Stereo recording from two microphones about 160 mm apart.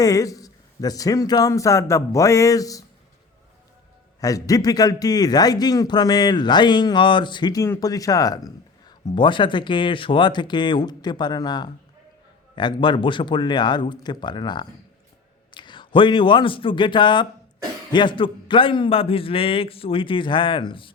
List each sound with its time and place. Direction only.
0.0 s a man's voice: 20° left (ahead or behind)
4.2 s a man's voice: 20° left (ahead or behind)